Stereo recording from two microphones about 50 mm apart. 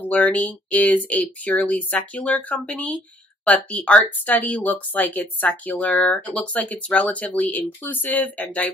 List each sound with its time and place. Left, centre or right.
0.0 s speech: left